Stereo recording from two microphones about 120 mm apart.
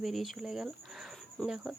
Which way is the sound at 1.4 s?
5° left (ahead or behind).